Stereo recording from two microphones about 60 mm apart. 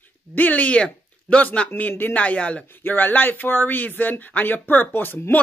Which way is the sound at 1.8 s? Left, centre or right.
Left.